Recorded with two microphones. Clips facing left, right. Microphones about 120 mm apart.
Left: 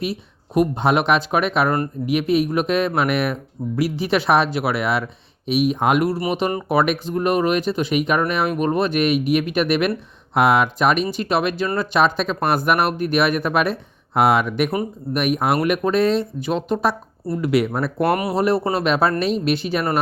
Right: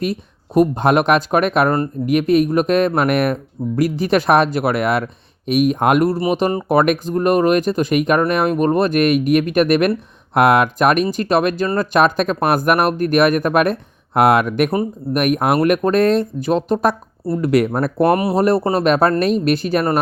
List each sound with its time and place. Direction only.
0.0 s speech: 45° right (ahead or behind)
6.3 s speech: 35° right (ahead or behind)
6.7 s speech: 45° right (ahead or behind)
18.1 s speech: 25° right (ahead or behind)
18.3 s speech: 40° right (ahead or behind)